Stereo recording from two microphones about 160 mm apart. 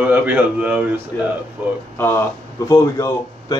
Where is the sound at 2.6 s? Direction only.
20° left (ahead or behind).